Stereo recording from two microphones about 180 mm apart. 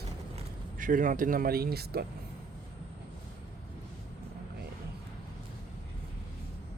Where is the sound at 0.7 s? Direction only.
45° right (ahead or behind).